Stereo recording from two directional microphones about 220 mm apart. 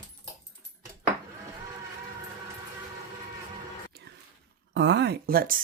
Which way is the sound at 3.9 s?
45° right (ahead or behind).